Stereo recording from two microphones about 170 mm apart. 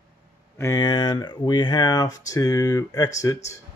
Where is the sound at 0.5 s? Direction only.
20° left (ahead or behind).